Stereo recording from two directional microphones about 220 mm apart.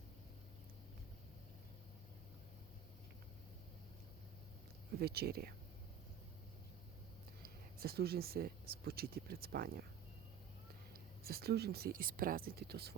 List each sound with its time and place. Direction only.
4.9 s speech: 45° right (ahead or behind)
7.4 s speech: 45° right (ahead or behind)
11.2 s speech: 45° right (ahead or behind)